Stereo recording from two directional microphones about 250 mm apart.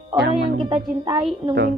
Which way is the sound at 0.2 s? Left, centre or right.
Right.